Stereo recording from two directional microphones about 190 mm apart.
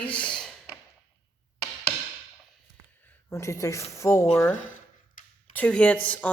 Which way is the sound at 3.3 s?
15° left (ahead or behind).